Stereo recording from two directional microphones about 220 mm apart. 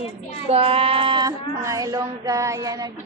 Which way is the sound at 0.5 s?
25° right (ahead or behind).